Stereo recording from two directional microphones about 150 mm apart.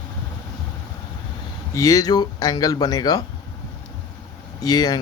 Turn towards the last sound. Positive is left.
turn(degrees=25)  # may be behind; listen again after turning